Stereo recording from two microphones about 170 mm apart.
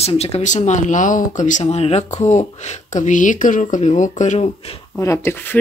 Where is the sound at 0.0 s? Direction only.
40° left (ahead or behind).